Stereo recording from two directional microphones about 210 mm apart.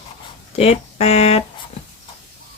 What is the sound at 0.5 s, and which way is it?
Speech, 30° left (ahead or behind).